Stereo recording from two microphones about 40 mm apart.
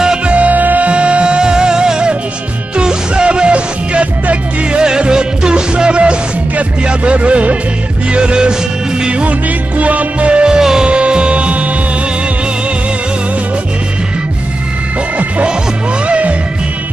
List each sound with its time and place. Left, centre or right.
0.3 s music: right
4.8 s music: centre
9.8 s music: right
10.6 s music: centre
10.9 s music: right
16.1 s music: right